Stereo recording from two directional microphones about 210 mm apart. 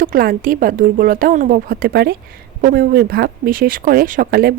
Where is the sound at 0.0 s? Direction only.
45° right (ahead or behind).